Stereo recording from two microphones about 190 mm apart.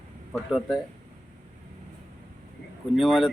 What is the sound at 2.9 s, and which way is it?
Speech, centre (ahead or behind).